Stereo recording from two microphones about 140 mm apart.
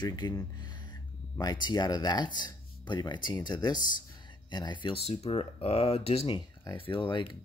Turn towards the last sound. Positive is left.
turn(degrees=35)  # may be behind; listen again after turning